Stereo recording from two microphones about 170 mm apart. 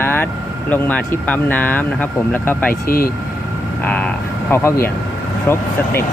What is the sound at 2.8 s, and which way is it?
Speech, 60° left (ahead or behind).